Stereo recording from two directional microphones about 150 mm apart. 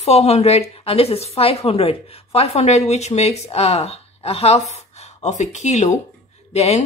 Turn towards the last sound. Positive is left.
turn(degrees=45)  # may be behind; listen again after turning